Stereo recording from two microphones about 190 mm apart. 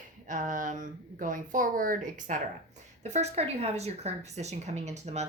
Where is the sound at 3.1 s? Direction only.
35° right (ahead or behind).